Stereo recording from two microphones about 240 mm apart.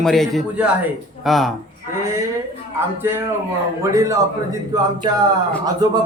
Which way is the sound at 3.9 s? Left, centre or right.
Centre.